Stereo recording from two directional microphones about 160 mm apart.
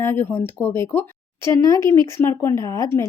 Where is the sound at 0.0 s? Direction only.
15° left (ahead or behind).